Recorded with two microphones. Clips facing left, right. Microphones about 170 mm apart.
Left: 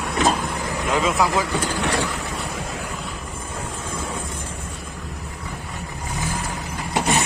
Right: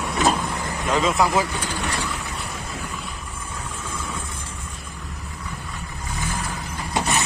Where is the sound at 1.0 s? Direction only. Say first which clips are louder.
Right 1 dB; 5° left (ahead or behind).